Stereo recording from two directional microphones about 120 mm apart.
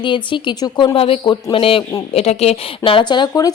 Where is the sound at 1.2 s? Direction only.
40° left (ahead or behind).